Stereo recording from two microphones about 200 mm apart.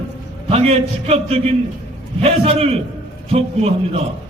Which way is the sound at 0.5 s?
30° right (ahead or behind).